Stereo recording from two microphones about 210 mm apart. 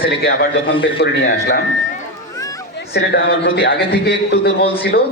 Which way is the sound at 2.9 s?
55° left (ahead or behind).